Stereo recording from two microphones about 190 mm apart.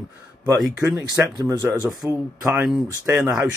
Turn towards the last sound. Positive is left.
turn(degrees=-10)  # may be behind; listen again after turning